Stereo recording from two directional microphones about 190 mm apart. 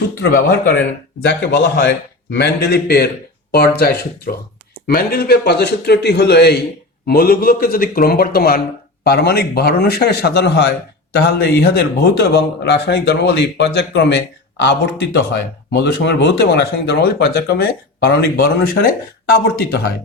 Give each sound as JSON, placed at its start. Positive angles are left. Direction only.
{"t": 0.3, "sound": "a man's voice", "side_deg": 50}
{"t": 1.2, "sound": "a man's voice", "side_deg": 60}